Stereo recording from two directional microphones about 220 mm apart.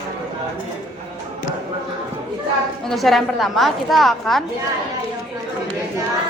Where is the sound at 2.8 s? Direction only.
Centre (ahead or behind).